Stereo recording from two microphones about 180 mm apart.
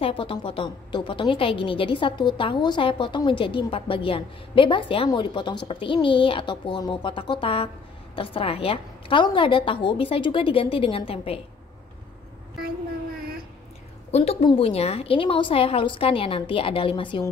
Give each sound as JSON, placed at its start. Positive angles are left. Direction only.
{"t": 0.0, "sound": "a woman's voice", "side_deg": 30}
{"t": 14.1, "sound": "a woman's voice", "side_deg": 35}